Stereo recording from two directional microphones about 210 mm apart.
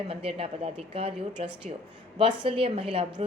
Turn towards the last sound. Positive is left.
turn(degrees=-25)  # may be behind; listen again after turning